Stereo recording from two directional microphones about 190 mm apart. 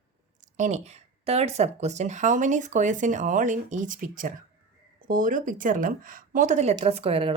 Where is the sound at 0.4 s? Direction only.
40° right (ahead or behind).